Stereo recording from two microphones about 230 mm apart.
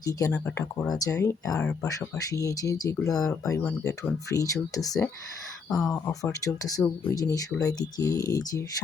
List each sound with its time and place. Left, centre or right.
0.0 s speech: centre
5.6 s speech: centre
6.1 s speech: centre